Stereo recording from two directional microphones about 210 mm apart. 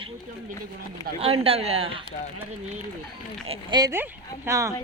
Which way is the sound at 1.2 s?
30° right (ahead or behind).